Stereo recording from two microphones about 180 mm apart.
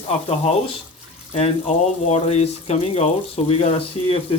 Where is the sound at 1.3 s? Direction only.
35° left (ahead or behind).